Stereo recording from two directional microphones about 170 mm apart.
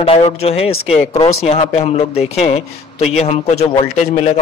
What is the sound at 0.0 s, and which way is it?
Speech, 35° left (ahead or behind).